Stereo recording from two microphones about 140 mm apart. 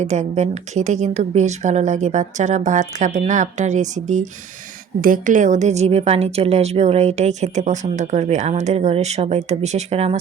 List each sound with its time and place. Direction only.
0.0 s a woman's voice: 55° right (ahead or behind)
4.9 s a woman's voice: 75° right (ahead or behind); by 10.2 s 50° right (ahead or behind)